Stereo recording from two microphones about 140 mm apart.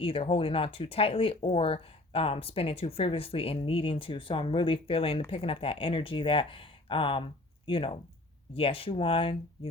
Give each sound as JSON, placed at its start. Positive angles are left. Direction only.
{"t": 0.0, "sound": "speech", "side_deg": 40}